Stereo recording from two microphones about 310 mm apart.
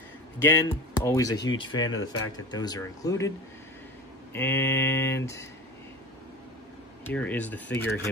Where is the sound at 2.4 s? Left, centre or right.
Centre.